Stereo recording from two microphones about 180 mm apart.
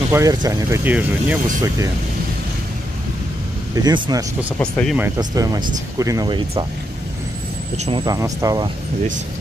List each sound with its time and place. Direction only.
0.1 s speech: 20° right (ahead or behind)
3.7 s speech: 20° right (ahead or behind)
4.6 s speech: 10° left (ahead or behind)
4.9 s speech: 15° right (ahead or behind)
7.7 s speech: 40° right (ahead or behind)
8.0 s speech: 20° right (ahead or behind)